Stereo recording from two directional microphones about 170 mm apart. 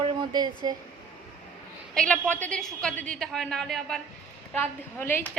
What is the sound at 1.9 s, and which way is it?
A woman's voice, 5° left (ahead or behind).